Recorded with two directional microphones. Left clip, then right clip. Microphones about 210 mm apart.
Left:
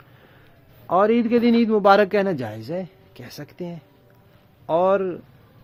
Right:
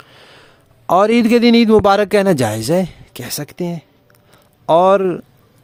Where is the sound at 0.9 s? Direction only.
55° right (ahead or behind).